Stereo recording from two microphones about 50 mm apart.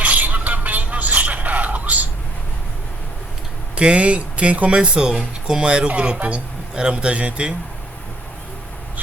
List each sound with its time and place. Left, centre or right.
0.0 s a sound: right
3.8 s speech: right
4.8 s speech: centre